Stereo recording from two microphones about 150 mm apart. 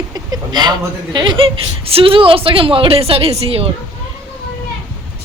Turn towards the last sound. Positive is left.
turn(degrees=-40)  # may be behind; listen again after turning